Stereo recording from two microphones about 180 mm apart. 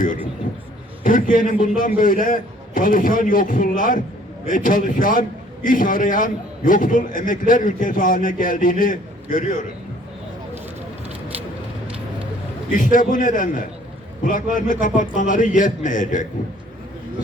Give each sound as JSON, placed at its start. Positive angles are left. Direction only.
{"t": 1.0, "sound": "a man's voice", "side_deg": 50}
{"t": 12.7, "sound": "a man's voice", "side_deg": 50}